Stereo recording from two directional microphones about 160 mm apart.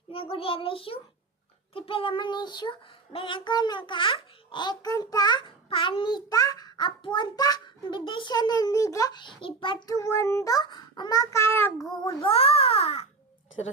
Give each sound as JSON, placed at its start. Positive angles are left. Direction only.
{"t": 0.1, "sound": "a child's voice", "side_deg": 35}
{"t": 1.7, "sound": "child singing", "side_deg": 35}
{"t": 12.2, "sound": "a child's voice", "side_deg": 35}